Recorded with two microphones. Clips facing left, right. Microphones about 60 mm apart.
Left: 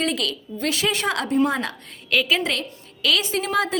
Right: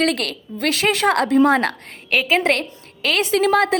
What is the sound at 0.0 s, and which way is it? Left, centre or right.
A woman's voice, right.